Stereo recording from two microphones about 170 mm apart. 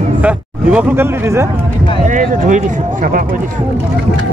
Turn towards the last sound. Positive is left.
turn(degrees=-50)  # may be behind; listen again after turning